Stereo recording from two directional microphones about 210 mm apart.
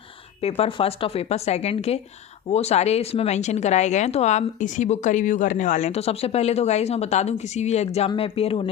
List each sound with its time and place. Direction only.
0.4 s speech: 25° left (ahead or behind)